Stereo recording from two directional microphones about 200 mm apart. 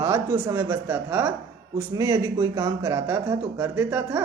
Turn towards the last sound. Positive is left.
turn(degrees=-10)  # may be behind; listen again after turning